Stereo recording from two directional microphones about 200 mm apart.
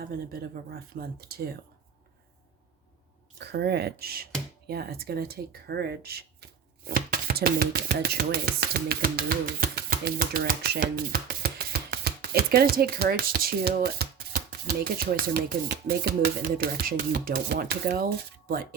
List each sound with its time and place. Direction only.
0.0 s speech: 50° right (ahead or behind)
3.3 s speech: 55° right (ahead or behind)